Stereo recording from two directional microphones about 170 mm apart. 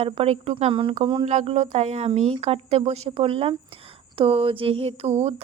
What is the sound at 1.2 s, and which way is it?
A woman's voice, 45° right (ahead or behind).